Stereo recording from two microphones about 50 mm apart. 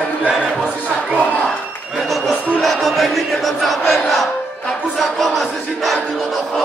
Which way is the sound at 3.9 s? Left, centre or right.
Centre.